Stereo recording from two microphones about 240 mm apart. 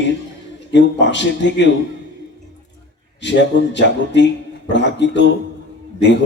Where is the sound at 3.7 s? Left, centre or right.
Left.